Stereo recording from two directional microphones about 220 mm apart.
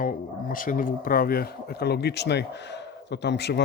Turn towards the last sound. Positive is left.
turn(degrees=50)  # may be behind; listen again after turning